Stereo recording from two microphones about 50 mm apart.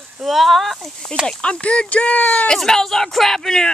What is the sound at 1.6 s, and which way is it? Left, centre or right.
Speech, left.